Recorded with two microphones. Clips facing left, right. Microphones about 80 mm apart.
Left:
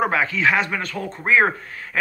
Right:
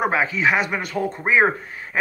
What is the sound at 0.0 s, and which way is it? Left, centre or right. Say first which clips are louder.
A man's voice: even; centre.